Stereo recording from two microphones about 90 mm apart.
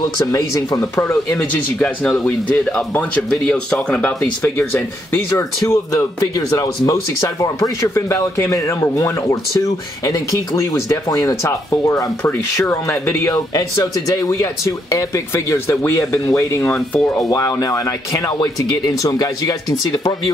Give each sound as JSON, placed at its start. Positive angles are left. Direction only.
{"t": 0.3, "sound": "speech", "side_deg": 45}
{"t": 0.7, "sound": "speech", "side_deg": 30}
{"t": 5.7, "sound": "speech", "side_deg": 35}
{"t": 12.2, "sound": "speech", "side_deg": 25}
{"t": 16.7, "sound": "speech", "side_deg": 5}
{"t": 17.3, "sound": "speech", "side_deg": 40}